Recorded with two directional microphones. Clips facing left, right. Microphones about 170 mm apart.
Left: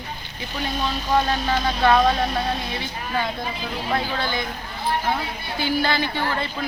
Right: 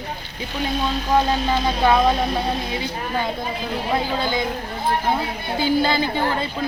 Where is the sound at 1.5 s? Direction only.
15° right (ahead or behind).